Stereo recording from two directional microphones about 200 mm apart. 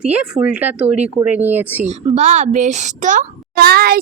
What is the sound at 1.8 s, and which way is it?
A woman's voice, 35° right (ahead or behind).